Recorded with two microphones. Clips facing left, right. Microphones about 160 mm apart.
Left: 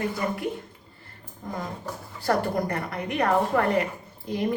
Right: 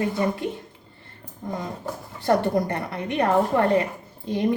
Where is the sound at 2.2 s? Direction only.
25° right (ahead or behind).